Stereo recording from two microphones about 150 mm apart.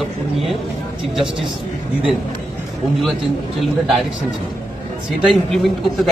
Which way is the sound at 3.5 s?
Centre (ahead or behind).